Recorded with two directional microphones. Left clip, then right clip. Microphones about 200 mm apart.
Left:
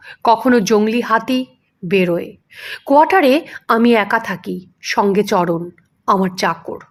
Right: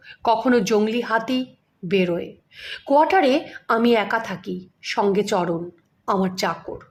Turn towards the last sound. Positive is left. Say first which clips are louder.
# left 6 dB
turn(degrees=20)  # may be behind; listen again after turning